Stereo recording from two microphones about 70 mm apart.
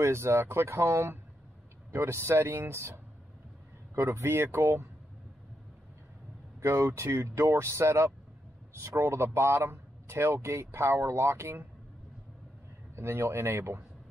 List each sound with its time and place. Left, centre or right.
0.0 s a man's voice: right
3.9 s a man's voice: right
6.6 s a man's voice: right
12.9 s a man's voice: right